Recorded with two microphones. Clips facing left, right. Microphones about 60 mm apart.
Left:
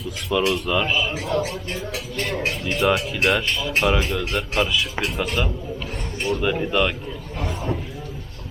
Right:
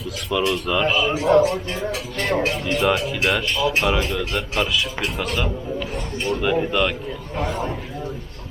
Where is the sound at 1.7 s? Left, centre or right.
Right.